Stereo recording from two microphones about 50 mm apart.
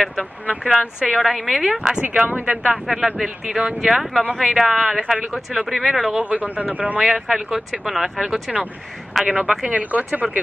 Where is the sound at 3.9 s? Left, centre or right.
Centre.